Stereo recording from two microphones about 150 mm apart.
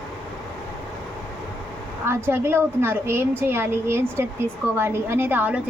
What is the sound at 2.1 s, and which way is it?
A woman's voice, 15° right (ahead or behind).